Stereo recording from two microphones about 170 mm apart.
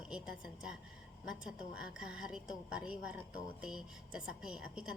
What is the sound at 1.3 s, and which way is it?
A woman's voice, 5° right (ahead or behind).